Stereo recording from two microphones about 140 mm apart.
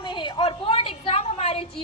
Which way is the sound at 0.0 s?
35° left (ahead or behind).